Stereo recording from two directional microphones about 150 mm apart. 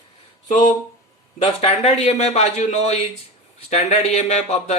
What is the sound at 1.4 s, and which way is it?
Speech, 45° left (ahead or behind).